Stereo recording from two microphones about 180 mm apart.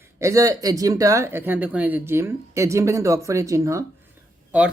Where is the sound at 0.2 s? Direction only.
15° right (ahead or behind).